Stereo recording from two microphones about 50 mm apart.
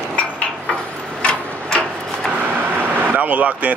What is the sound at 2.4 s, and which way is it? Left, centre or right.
Vehicle, right.